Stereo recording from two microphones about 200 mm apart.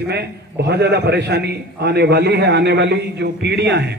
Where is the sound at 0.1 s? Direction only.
55° right (ahead or behind).